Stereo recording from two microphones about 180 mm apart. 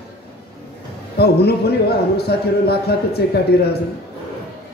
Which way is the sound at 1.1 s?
65° left (ahead or behind).